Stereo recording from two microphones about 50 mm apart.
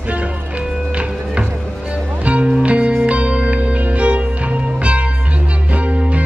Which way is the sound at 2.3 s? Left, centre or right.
Right.